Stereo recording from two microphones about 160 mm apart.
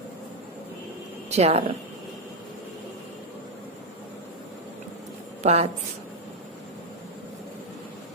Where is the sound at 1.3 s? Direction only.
40° right (ahead or behind).